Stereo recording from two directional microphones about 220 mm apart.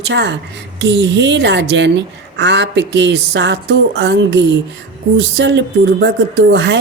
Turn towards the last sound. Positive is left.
turn(degrees=-55)  # may be behind; listen again after turning